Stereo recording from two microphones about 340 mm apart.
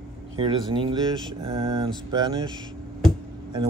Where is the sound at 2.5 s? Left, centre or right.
Centre.